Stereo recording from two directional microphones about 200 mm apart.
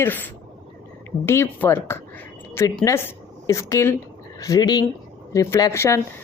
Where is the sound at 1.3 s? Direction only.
10° left (ahead or behind).